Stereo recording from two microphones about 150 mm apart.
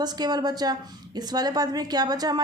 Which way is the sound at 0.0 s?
25° right (ahead or behind).